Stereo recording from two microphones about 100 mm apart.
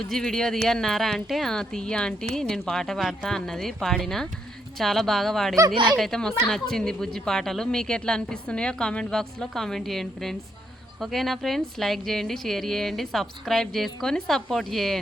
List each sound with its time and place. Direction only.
0.1 s a woman's voice: 5° left (ahead or behind)